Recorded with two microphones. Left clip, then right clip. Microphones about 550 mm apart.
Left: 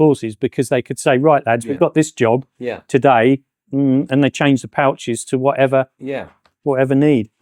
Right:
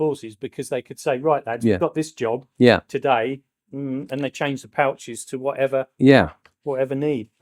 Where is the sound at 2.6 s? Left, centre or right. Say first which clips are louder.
Right 10 dB; right.